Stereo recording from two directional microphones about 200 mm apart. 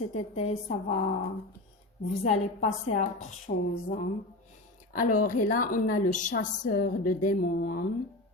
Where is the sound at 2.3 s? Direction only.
35° left (ahead or behind).